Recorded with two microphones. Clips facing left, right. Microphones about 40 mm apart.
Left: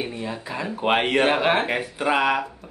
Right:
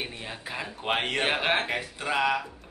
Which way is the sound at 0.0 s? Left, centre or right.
Centre.